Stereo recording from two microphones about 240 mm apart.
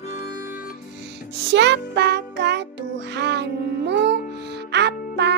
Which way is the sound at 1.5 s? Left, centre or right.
Right.